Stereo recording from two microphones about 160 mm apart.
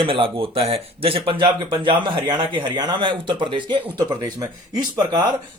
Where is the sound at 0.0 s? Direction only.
35° right (ahead or behind).